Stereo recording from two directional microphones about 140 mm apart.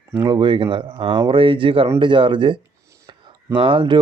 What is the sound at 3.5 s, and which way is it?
Speech, 40° right (ahead or behind).